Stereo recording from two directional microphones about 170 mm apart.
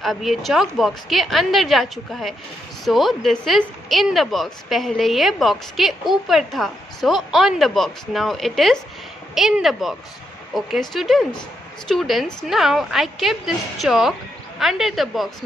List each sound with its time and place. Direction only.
0.0 s speech: centre (ahead or behind)